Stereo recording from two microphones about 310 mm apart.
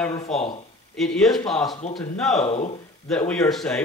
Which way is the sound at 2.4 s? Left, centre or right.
Left.